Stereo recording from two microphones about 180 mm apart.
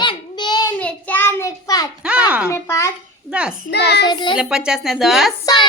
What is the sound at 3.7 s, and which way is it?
Child singing, 65° left (ahead or behind).